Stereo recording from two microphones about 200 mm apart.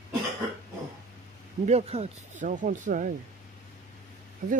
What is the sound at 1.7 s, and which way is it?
Speech, 30° right (ahead or behind).